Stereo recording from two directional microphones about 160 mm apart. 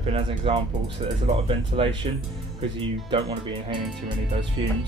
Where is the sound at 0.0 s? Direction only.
35° right (ahead or behind).